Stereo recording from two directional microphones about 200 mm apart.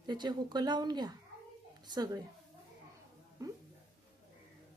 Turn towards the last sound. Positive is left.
turn(degrees=-15)  # may be behind; listen again after turning